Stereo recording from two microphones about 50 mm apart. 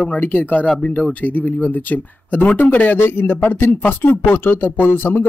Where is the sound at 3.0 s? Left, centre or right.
Left.